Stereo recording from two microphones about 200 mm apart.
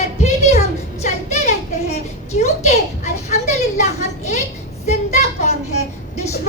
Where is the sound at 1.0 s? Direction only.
35° left (ahead or behind).